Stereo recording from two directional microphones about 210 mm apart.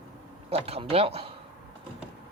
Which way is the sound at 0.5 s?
30° right (ahead or behind).